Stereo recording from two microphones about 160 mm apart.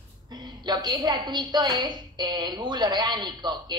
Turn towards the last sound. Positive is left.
turn(degrees=-25)  # may be behind; listen again after turning